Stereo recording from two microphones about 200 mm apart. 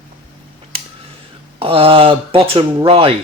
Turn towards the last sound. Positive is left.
turn(degrees=-25)  # may be behind; listen again after turning